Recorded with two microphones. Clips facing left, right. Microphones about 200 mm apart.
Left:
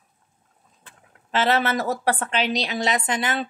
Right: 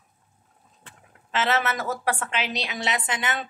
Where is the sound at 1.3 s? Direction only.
35° left (ahead or behind).